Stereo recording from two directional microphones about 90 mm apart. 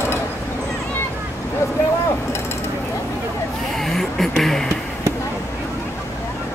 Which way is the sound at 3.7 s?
5° left (ahead or behind).